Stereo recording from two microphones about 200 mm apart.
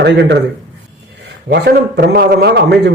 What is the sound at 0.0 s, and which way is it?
Speech, 60° right (ahead or behind).